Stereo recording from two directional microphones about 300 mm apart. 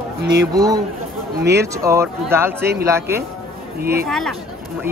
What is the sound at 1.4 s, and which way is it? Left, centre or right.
Speech, right.